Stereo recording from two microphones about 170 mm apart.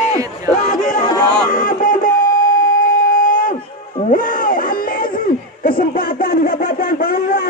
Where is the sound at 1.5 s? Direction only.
50° left (ahead or behind).